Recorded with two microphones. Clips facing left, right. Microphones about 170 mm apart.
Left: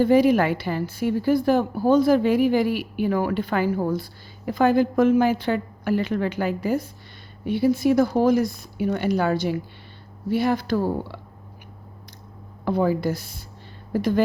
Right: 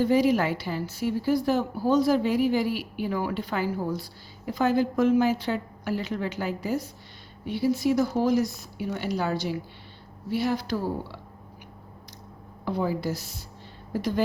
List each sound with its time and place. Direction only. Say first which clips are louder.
0.0 s a woman's voice: left 5 dB; 55° left (ahead or behind)
12.6 s a woman's voice: left 6 dB; 55° left (ahead or behind)